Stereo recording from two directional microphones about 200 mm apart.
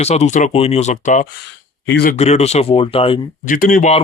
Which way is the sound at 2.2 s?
35° left (ahead or behind).